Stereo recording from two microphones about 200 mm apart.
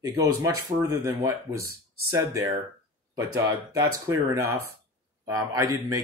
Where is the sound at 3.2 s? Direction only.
15° right (ahead or behind).